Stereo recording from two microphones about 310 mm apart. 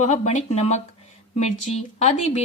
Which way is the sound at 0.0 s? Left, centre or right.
Left.